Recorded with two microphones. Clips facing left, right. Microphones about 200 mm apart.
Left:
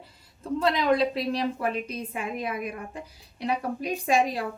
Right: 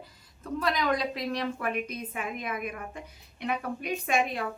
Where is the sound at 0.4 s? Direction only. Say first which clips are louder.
Left 5 dB; 25° left (ahead or behind).